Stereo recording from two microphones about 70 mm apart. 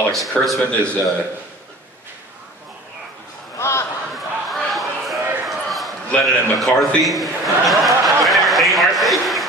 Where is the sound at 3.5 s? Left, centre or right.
Left.